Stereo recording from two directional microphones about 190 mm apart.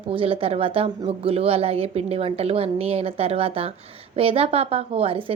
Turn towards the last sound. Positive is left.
turn(degrees=-30)  # may be behind; listen again after turning